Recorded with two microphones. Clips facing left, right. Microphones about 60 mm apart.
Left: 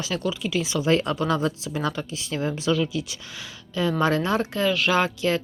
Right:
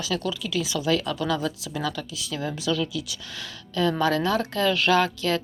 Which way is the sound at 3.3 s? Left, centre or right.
Centre.